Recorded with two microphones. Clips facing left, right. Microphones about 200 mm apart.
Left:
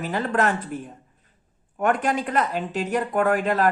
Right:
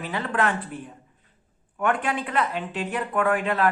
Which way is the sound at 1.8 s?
40° left (ahead or behind).